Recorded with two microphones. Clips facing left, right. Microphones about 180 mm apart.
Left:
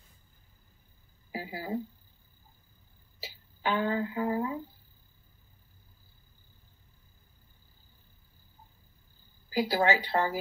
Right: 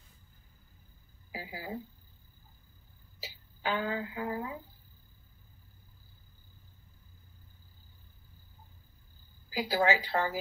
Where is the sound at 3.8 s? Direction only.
40° left (ahead or behind).